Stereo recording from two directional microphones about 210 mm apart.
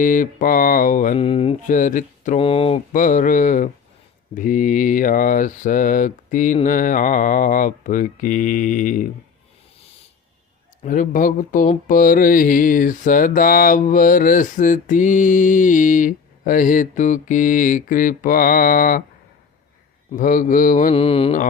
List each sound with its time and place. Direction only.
0.0 s mantra: 40° left (ahead or behind)
1.2 s speech: 25° left (ahead or behind)
2.9 s mantra: 40° left (ahead or behind)
10.8 s mantra: 40° left (ahead or behind)
20.1 s mantra: 40° left (ahead or behind)
20.9 s speech: 25° left (ahead or behind)